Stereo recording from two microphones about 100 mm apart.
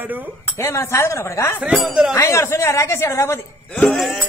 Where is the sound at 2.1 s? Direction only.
30° left (ahead or behind).